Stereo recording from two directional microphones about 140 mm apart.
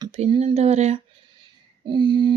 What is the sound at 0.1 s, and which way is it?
Speech, 45° right (ahead or behind).